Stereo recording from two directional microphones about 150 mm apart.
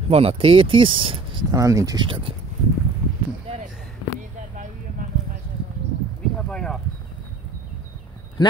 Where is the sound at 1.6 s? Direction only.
20° right (ahead or behind).